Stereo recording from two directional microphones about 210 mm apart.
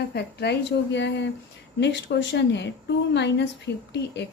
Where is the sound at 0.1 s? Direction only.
50° left (ahead or behind).